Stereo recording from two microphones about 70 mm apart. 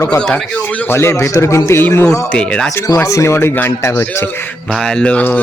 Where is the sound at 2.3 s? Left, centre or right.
Centre.